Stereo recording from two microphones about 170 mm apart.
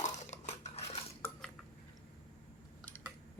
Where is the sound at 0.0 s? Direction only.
40° left (ahead or behind).